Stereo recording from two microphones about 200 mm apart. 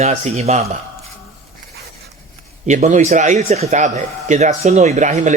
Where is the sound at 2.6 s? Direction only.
35° right (ahead or behind).